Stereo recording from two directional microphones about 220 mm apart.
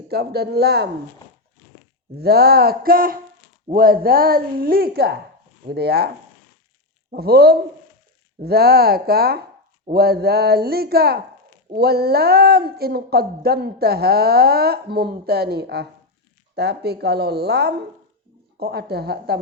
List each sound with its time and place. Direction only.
0.1 s speech: 45° right (ahead or behind)
2.1 s speech: 45° right (ahead or behind)
7.1 s speech: 45° right (ahead or behind)